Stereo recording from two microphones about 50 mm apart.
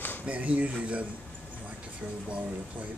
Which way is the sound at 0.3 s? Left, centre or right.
Right.